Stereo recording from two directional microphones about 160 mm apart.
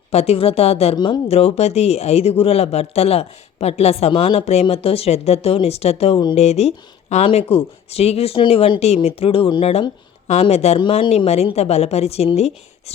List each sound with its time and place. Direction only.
0.1 s speech: 40° left (ahead or behind)
0.9 s speech: 25° left (ahead or behind)
1.3 s speech: 40° left (ahead or behind)